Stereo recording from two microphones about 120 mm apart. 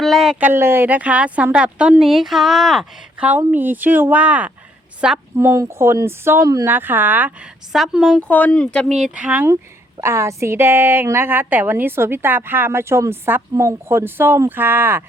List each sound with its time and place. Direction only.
0.0 s a sound: centre (ahead or behind)
0.3 s a woman's voice: 15° right (ahead or behind); by 3.2 s centre (ahead or behind)
3.2 s a woman's voice: 15° right (ahead or behind)
5.4 s a woman's voice: 20° right (ahead or behind)
6.7 s speech: 15° right (ahead or behind)
7.7 s a woman's voice: centre (ahead or behind)
8.3 s speech: 10° left (ahead or behind)
9.0 s speech: 5° right (ahead or behind)
10.0 s a woman's voice: 20° right (ahead or behind)